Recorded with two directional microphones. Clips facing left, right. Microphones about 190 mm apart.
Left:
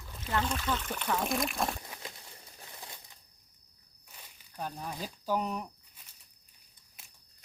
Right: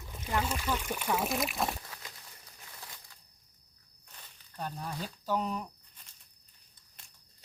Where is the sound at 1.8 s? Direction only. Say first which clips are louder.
Left 3 dB; 20° left (ahead or behind).